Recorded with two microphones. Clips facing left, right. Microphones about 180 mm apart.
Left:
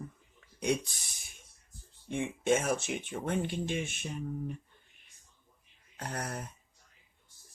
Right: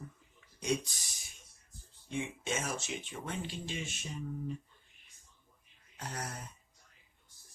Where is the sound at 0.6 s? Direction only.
60° left (ahead or behind).